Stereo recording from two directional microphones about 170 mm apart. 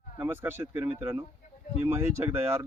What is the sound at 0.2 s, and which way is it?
Speech, 15° right (ahead or behind).